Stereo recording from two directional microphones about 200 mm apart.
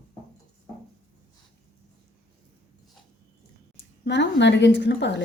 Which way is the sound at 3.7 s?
60° left (ahead or behind).